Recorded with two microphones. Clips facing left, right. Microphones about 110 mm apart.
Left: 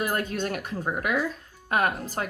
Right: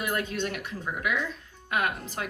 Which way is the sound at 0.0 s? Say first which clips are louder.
Left 2 dB; 40° left (ahead or behind).